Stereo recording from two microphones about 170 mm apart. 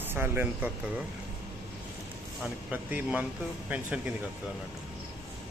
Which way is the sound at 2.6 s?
10° right (ahead or behind).